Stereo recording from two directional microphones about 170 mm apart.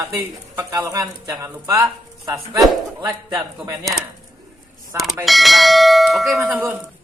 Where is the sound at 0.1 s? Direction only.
15° right (ahead or behind).